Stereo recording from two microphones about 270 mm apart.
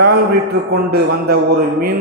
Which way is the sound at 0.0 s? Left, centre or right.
Right.